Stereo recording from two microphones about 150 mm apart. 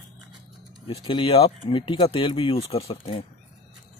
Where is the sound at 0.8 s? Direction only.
35° left (ahead or behind).